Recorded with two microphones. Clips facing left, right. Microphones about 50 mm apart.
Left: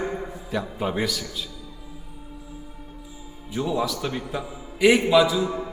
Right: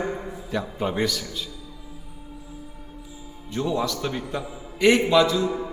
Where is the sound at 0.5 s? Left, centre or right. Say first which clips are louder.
Even; centre.